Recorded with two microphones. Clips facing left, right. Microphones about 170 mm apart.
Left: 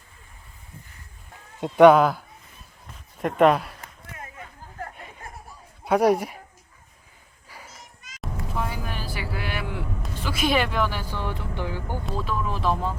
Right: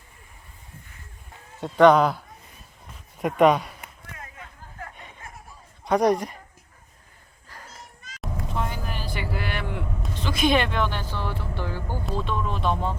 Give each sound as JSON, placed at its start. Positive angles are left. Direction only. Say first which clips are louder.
{"t": 1.6, "sound": "speech", "louder": "left 2 dB", "side_deg": 10}
{"t": 5.8, "sound": "speech", "louder": "left 1 dB", "side_deg": 5}
{"t": 7.4, "sound": "children playing", "louder": "even", "side_deg": 10}
{"t": 8.2, "sound": "vehicle", "louder": "even", "side_deg": 5}
{"t": 12.0, "sound": "speech", "louder": "right 1 dB", "side_deg": 5}